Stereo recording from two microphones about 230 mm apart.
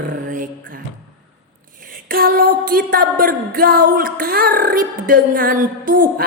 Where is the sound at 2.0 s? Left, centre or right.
Right.